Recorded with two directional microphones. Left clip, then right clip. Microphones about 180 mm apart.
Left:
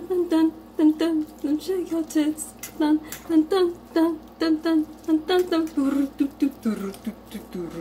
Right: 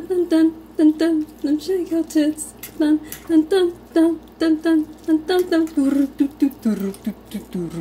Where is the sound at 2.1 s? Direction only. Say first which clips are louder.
Right 4 dB; 20° right (ahead or behind).